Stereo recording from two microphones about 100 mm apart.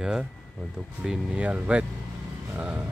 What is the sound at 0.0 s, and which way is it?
Speech, 5° right (ahead or behind).